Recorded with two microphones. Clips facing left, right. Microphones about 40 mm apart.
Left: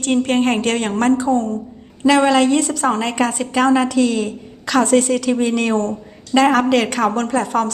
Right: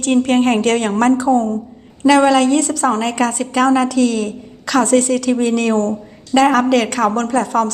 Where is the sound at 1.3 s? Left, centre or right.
Right.